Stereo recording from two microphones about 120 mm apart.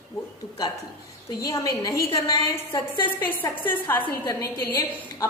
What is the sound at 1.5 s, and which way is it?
Speech, 30° left (ahead or behind).